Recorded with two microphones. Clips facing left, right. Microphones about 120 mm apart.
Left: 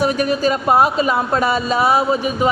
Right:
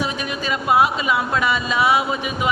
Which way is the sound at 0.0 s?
40° left (ahead or behind).